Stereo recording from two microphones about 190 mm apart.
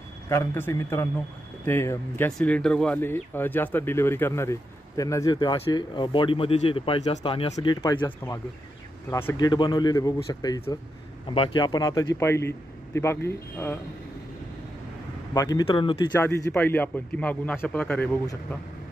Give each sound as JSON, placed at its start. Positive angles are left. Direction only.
{"t": 0.3, "sound": "speech", "side_deg": 15}
{"t": 15.3, "sound": "speech", "side_deg": 20}
{"t": 16.1, "sound": "speech", "side_deg": 10}